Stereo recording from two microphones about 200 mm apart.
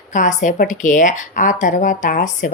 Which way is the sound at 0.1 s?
40° left (ahead or behind).